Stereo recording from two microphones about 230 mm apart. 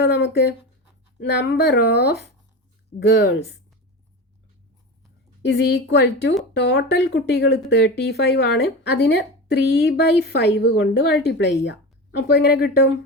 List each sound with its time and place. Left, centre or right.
0.0 s speech: left
5.4 s speech: left